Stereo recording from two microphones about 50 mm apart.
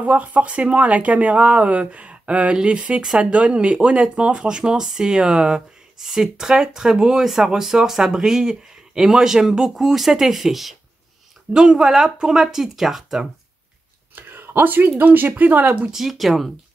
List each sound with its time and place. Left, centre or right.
0.0 s speech: right; by 13.3 s centre
14.1 s speech: right
15.9 s speech: centre